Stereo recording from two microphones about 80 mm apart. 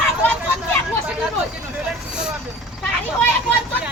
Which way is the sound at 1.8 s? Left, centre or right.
Centre.